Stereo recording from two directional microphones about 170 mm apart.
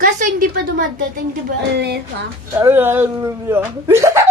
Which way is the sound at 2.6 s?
15° right (ahead or behind).